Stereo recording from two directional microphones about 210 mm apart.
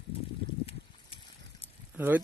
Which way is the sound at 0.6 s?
25° left (ahead or behind).